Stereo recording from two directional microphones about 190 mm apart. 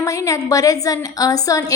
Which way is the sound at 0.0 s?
20° left (ahead or behind).